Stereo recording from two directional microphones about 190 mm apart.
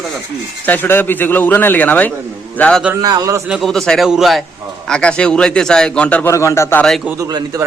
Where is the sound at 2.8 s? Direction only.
10° right (ahead or behind).